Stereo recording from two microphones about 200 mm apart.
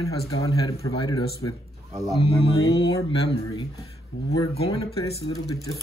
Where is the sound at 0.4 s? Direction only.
15° left (ahead or behind).